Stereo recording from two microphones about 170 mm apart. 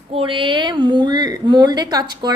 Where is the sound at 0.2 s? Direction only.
30° right (ahead or behind).